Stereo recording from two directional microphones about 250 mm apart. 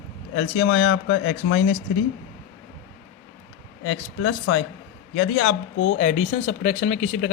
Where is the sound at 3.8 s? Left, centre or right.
Left.